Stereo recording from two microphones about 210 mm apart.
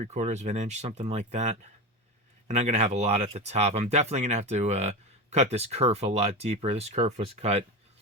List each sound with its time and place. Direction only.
0.0 s speech: 35° right (ahead or behind)